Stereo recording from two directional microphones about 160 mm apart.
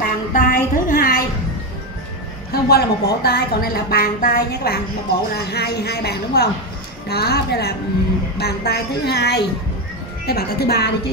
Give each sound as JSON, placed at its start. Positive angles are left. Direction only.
{"t": 0.0, "sound": "a sound", "side_deg": 60}
{"t": 2.5, "sound": "a woman's voice", "side_deg": 75}
{"t": 10.2, "sound": "speech", "side_deg": 75}